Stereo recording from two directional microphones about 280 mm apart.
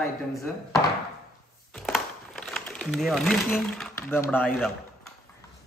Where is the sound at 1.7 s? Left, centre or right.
Centre.